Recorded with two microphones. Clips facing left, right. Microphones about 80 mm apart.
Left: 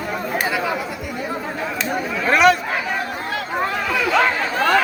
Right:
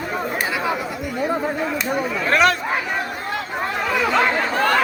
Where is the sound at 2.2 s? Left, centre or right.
Centre.